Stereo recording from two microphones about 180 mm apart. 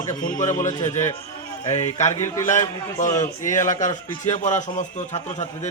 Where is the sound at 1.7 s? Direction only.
40° left (ahead or behind).